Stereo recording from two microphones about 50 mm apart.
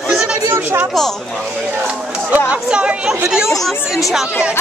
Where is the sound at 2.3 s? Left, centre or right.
Right.